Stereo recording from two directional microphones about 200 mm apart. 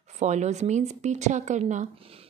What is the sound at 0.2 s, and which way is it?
Speech, 35° right (ahead or behind).